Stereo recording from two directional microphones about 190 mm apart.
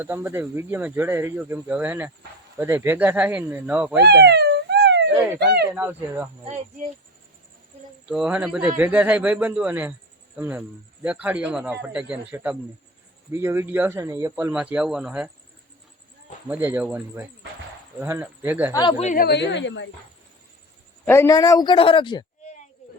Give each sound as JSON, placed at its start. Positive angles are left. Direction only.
{"t": 0.0, "sound": "speech", "side_deg": -15}
{"t": 4.0, "sound": "a sound", "side_deg": -60}
{"t": 5.7, "sound": "speech", "side_deg": -10}
{"t": 8.0, "sound": "speech", "side_deg": -5}
{"t": 16.5, "sound": "speech", "side_deg": -10}
{"t": 18.7, "sound": "a man's voice", "side_deg": 25}
{"t": 19.0, "sound": "a woman's voice", "side_deg": 50}
{"t": 21.0, "sound": "a man's voice", "side_deg": 15}